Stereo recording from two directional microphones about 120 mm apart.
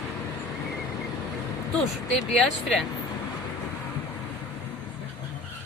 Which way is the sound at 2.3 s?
Centre (ahead or behind).